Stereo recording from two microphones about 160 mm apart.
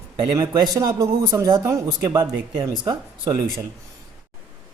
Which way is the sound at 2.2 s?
30° right (ahead or behind).